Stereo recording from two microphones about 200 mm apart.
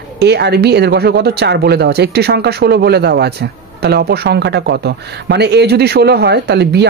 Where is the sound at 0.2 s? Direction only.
55° right (ahead or behind).